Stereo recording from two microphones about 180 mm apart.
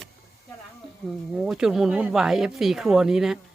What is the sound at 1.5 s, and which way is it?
Speech, 5° right (ahead or behind).